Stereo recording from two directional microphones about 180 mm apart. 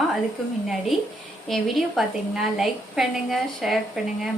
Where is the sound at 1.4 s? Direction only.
Centre (ahead or behind).